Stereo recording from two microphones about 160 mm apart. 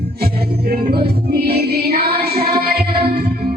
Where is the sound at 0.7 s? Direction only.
75° right (ahead or behind).